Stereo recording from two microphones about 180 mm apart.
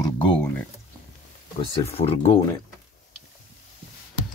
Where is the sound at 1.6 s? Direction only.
25° left (ahead or behind).